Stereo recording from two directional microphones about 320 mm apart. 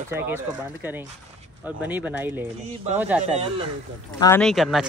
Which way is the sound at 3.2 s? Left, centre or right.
Right.